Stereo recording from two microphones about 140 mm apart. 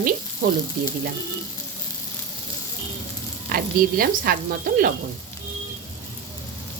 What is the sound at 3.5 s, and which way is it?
Speech, 90° right.